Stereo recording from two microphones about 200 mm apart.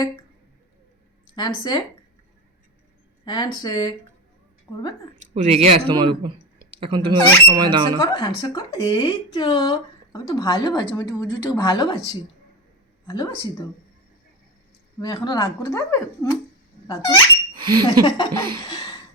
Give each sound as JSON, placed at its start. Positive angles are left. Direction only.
{"t": 1.4, "sound": "speech", "side_deg": 20}
{"t": 3.2, "sound": "speech", "side_deg": 20}
{"t": 5.3, "sound": "speech", "side_deg": -30}
{"t": 8.2, "sound": "speech", "side_deg": 20}
{"t": 13.1, "sound": "speech", "side_deg": 20}
{"t": 15.0, "sound": "speech", "side_deg": 20}
{"t": 16.8, "sound": "squeak", "side_deg": 20}
{"t": 17.5, "sound": "a sound", "side_deg": -25}
{"t": 18.0, "sound": "speech", "side_deg": 20}
{"t": 18.7, "sound": "a sound", "side_deg": 20}